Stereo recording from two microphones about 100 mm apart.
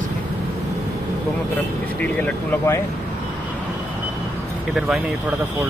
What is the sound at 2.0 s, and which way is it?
Speech, 15° left (ahead or behind).